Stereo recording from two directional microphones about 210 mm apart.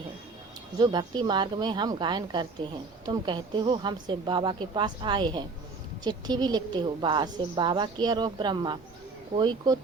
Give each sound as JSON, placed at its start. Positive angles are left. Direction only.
{"t": 0.8, "sound": "a woman's voice", "side_deg": -20}